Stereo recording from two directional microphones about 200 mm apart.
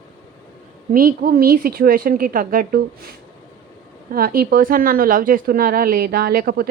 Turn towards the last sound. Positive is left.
turn(degrees=-50)  # may be behind; listen again after turning